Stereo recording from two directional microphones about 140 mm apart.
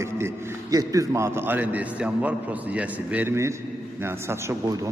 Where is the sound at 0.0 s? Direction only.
20° right (ahead or behind).